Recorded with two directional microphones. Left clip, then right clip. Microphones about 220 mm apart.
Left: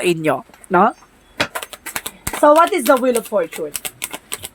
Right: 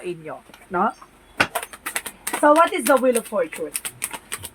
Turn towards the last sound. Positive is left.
turn(degrees=25)  # may be behind; listen again after turning